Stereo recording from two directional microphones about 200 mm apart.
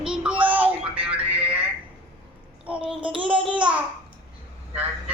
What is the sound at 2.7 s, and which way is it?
Speech, 5° right (ahead or behind).